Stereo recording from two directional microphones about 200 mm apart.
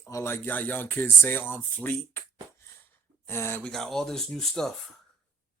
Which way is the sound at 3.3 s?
10° left (ahead or behind).